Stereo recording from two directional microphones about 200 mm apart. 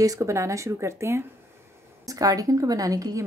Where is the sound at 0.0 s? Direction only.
15° right (ahead or behind).